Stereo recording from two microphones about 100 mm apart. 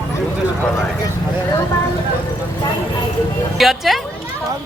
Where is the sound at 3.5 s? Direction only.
Centre (ahead or behind).